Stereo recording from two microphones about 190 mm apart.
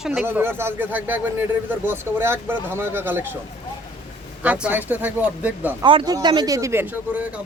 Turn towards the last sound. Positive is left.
turn(degrees=-10)  # may be behind; listen again after turning